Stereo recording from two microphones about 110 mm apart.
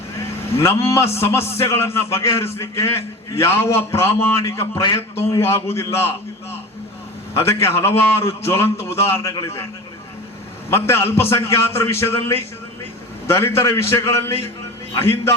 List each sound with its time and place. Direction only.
0.6 s a man's voice: 25° left (ahead or behind)
7.3 s a man's voice: 25° left (ahead or behind)
10.7 s a man's voice: 25° left (ahead or behind)